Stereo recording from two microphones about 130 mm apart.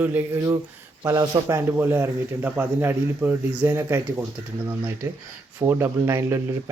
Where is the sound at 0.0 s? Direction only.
15° right (ahead or behind).